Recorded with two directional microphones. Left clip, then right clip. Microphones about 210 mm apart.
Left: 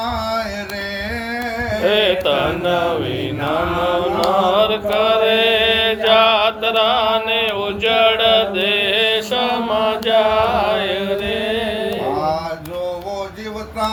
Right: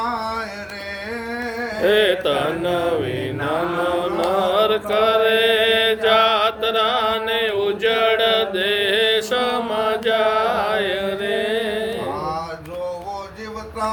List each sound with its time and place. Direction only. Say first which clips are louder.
1.8 s mantra: left 1 dB; 30° right (ahead or behind)
4.4 s mantra: left 3 dB; 35° right (ahead or behind)